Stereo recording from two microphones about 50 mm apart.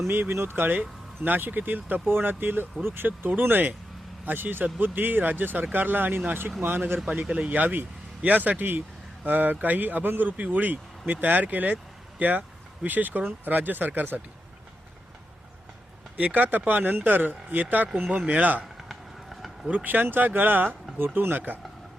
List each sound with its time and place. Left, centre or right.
0.3 s speech: right
7.3 s speech: right
16.1 s speech: right
18.9 s music: centre
19.8 s speech: right